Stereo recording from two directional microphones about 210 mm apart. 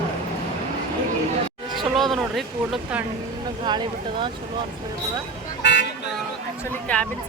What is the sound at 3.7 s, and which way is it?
Speech, 20° right (ahead or behind).